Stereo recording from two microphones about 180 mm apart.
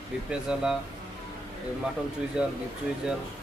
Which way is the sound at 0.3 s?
5° right (ahead or behind).